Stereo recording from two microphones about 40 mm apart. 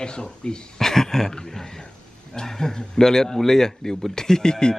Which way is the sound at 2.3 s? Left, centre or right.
Centre.